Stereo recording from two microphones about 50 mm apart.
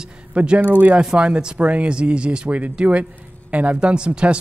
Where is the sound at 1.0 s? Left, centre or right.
Centre.